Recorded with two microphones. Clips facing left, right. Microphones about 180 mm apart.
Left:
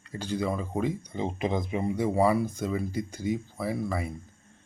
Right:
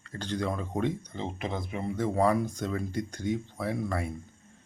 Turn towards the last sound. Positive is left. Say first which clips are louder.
# left 1 dB
turn(degrees=0)  # may be behind; listen again after turning